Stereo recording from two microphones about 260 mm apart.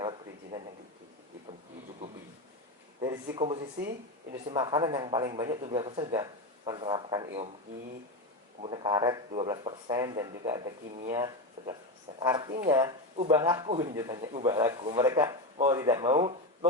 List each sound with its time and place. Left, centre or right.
0.0 s a sound: centre
3.3 s speech: right
8.6 s speech: centre